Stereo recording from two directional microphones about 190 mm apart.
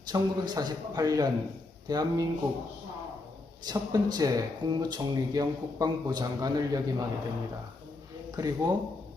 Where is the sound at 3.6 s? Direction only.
20° right (ahead or behind).